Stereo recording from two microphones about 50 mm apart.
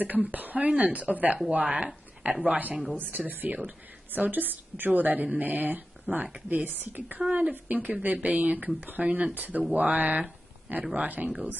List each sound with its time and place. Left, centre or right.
0.0 s speech: right
3.0 s speech: right
6.5 s speech: right